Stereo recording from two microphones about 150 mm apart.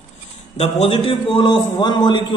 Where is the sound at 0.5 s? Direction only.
40° left (ahead or behind).